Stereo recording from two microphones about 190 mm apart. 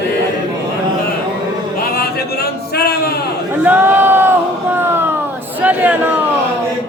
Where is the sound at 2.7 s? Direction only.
55° left (ahead or behind).